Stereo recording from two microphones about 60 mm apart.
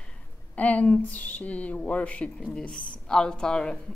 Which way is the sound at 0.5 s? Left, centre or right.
Left.